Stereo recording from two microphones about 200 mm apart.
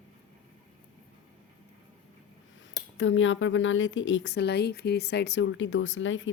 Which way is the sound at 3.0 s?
70° left (ahead or behind).